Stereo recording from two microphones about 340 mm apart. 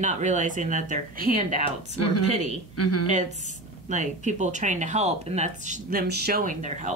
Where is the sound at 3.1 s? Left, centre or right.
Right.